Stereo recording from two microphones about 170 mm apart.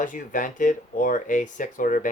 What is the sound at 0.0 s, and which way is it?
Speech, 50° left (ahead or behind).